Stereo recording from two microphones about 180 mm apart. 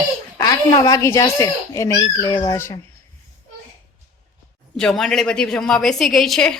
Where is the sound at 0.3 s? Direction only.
20° left (ahead or behind).